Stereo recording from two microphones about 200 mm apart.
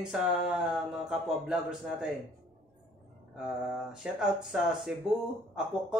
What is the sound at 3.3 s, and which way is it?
Speech, 5° right (ahead or behind).